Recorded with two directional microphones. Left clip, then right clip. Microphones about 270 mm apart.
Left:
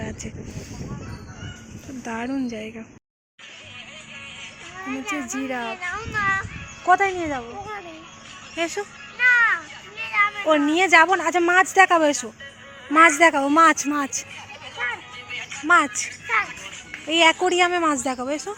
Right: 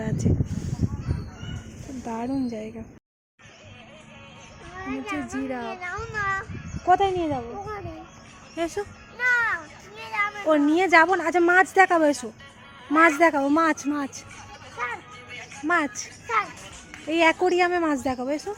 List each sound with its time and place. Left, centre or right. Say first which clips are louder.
2.0 s a child's voice: left 1 dB; centre
4.8 s a child's voice: left 2 dB; centre
8.5 s a sound: left 2 dB; centre
10.0 s a child's voice: left 5 dB; centre
15.3 s music: left 8 dB; right
15.6 s speech: left 6 dB; centre
16.0 s a sound: left 3 dB; centre
17.1 s speech: left 3 dB; centre